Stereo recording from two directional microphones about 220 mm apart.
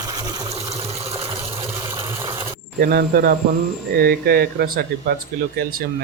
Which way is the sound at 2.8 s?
45° right (ahead or behind).